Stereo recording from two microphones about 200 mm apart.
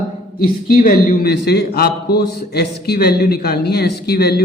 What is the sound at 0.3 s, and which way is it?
A man's voice, 45° left (ahead or behind).